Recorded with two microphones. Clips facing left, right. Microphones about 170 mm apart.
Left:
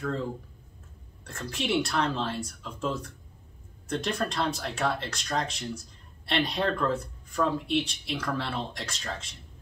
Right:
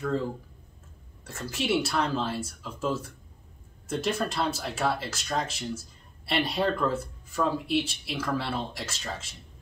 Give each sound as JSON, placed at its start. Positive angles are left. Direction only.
{"t": 0.0, "sound": "speech", "side_deg": -5}